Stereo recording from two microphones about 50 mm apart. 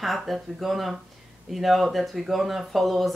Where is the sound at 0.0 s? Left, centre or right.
Centre.